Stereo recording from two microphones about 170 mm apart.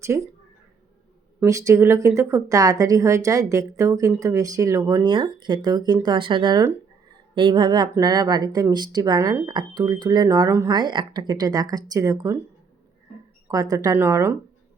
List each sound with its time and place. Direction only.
0.0 s speech: 15° right (ahead or behind)
1.5 s speech: 20° right (ahead or behind)
13.5 s speech: 20° right (ahead or behind)